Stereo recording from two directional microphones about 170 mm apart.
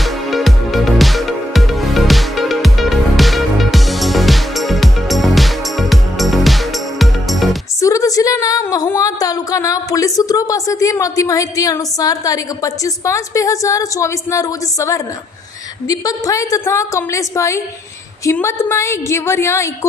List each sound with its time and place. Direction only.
0.0 s music: centre (ahead or behind)
7.8 s a sound: 20° left (ahead or behind)
15.9 s a woman's voice: 20° left (ahead or behind)